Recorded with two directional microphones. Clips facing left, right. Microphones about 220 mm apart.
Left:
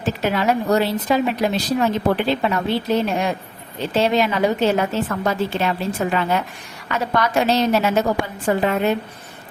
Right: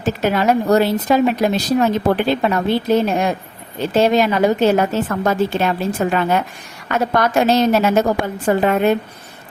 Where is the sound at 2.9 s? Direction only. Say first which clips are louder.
Right 4 dB; 45° right (ahead or behind).